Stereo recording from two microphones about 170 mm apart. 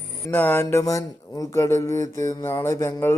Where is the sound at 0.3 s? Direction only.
10° left (ahead or behind).